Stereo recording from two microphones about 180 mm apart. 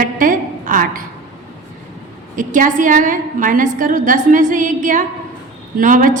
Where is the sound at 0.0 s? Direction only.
50° right (ahead or behind).